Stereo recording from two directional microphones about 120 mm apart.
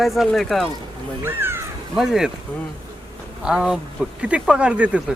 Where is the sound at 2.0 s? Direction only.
5° right (ahead or behind).